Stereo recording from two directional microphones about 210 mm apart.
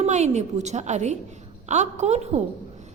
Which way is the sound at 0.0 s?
30° right (ahead or behind).